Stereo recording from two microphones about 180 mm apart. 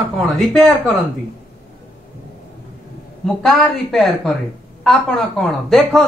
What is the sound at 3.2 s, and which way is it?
Speech, centre (ahead or behind).